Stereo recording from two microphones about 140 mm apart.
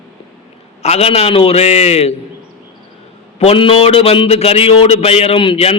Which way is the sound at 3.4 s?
40° left (ahead or behind).